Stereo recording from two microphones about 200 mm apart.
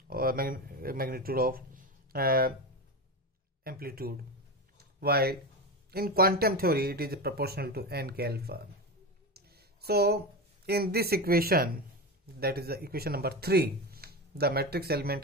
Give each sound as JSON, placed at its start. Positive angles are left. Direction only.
{"t": 0.1, "sound": "speech", "side_deg": -45}
{"t": 3.6, "sound": "speech", "side_deg": -50}